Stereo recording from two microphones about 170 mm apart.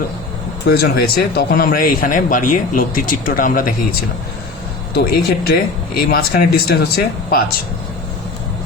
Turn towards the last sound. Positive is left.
turn(degrees=60)  # may be behind; listen again after turning